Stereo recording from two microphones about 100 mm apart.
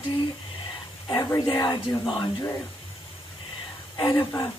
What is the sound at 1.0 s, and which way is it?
Speech, 45° left (ahead or behind).